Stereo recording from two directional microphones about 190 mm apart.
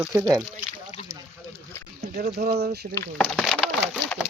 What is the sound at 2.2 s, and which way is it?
Speech, 50° right (ahead or behind).